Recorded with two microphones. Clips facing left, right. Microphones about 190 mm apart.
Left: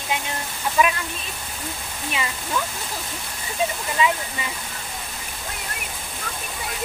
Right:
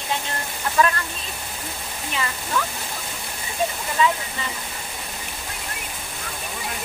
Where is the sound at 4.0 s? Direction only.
15° left (ahead or behind).